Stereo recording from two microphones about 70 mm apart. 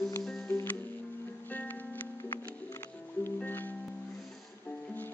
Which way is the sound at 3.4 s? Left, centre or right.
Left.